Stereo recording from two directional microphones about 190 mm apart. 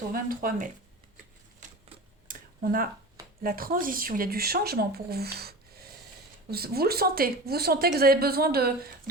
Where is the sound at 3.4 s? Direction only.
50° right (ahead or behind).